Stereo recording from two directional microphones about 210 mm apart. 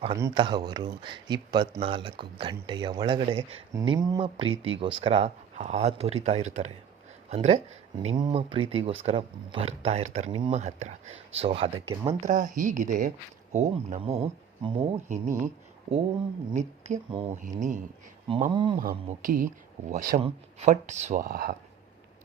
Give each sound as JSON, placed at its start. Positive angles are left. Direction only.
{"t": 0.2, "sound": "speech", "side_deg": -20}
{"t": 10.3, "sound": "speech", "side_deg": -25}
{"t": 10.6, "sound": "speech", "side_deg": -35}
{"t": 12.2, "sound": "speech", "side_deg": -35}
{"t": 16.5, "sound": "speech", "side_deg": -35}
{"t": 18.3, "sound": "speech", "side_deg": -35}
{"t": 18.5, "sound": "speech", "side_deg": -25}
{"t": 19.0, "sound": "speech", "side_deg": -40}